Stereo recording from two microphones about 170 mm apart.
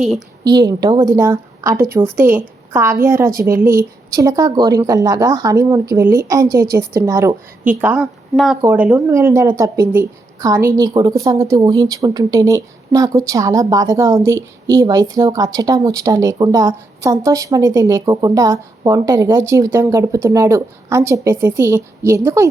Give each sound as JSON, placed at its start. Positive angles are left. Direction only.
{"t": 0.4, "sound": "a woman's voice", "side_deg": -25}